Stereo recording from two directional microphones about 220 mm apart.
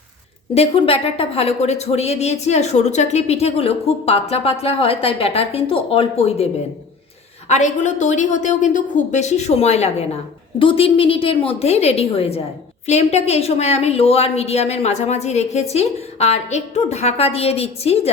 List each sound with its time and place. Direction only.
0.5 s a woman's voice: 25° left (ahead or behind)